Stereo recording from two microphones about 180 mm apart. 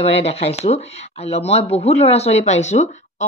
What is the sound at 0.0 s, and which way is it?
Speech, 35° left (ahead or behind).